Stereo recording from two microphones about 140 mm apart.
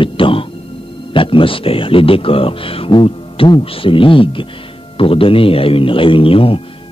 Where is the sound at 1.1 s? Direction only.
40° left (ahead or behind).